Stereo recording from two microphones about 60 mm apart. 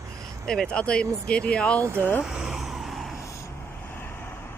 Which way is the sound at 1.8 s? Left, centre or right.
Right.